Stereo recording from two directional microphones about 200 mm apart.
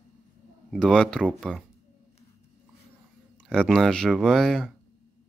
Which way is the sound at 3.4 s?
5° left (ahead or behind).